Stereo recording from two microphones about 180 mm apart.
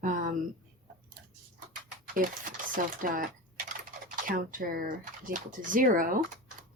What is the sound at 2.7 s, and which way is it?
Speech, 50° right (ahead or behind).